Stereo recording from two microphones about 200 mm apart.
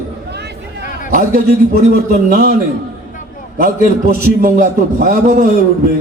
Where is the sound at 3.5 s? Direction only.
40° right (ahead or behind).